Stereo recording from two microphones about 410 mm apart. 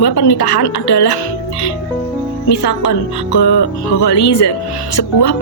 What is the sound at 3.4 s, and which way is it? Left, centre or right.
Speech, left.